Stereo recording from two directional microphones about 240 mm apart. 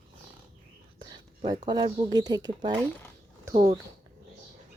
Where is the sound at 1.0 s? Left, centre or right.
Centre.